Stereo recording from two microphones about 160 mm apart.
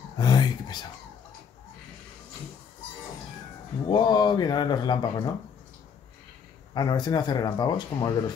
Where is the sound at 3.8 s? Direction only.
25° left (ahead or behind).